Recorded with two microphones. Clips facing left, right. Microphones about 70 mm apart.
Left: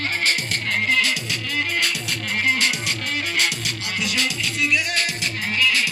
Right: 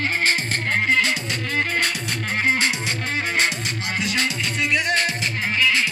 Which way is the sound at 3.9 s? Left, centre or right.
Right.